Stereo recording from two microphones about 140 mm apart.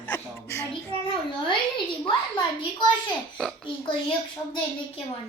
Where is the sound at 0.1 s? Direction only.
20° left (ahead or behind).